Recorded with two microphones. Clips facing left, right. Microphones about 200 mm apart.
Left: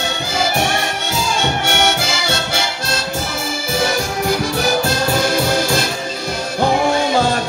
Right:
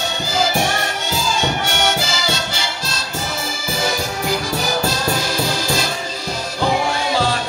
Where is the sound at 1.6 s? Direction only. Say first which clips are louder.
Left 2 dB; 55° left (ahead or behind).